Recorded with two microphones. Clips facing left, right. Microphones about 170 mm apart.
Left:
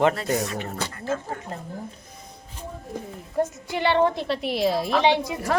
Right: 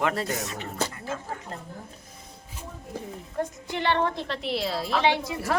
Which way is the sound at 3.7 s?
10° left (ahead or behind).